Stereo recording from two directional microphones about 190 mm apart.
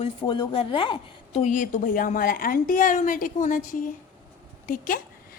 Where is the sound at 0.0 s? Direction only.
25° left (ahead or behind).